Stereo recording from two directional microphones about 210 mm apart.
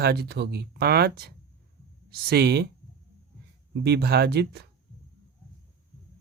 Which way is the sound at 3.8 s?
50° right (ahead or behind).